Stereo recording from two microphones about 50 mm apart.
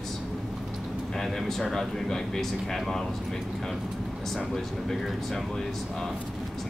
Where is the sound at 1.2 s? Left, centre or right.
Centre.